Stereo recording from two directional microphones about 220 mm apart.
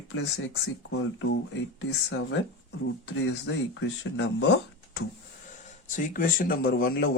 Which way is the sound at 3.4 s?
55° left (ahead or behind).